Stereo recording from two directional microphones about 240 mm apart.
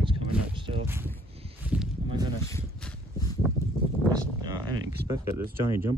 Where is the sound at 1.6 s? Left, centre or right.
Centre.